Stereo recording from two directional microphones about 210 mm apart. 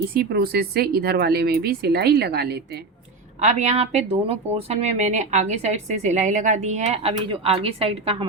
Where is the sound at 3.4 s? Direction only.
30° right (ahead or behind).